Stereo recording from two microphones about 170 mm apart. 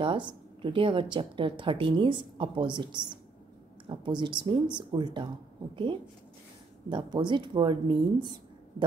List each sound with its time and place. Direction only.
0.0 s a woman's voice: 30° right (ahead or behind)
6.9 s a woman's voice: 25° right (ahead or behind)